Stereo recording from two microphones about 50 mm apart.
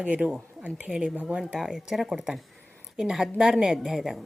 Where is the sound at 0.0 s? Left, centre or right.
Right.